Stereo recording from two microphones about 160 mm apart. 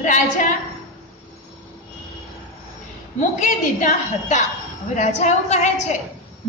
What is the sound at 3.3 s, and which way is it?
A woman's voice, 50° left (ahead or behind).